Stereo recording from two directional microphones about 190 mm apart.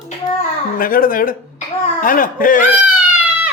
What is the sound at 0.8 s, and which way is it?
Speech, 50° left (ahead or behind).